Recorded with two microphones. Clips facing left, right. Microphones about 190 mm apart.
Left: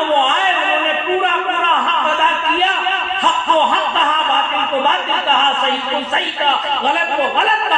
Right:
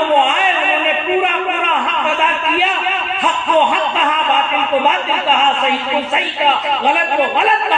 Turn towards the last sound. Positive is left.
turn(degrees=-10)  # may be behind; listen again after turning